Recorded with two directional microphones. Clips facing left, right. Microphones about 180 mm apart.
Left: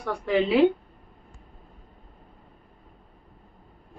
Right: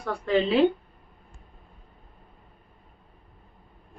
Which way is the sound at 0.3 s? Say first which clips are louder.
Left 1 dB; 10° left (ahead or behind).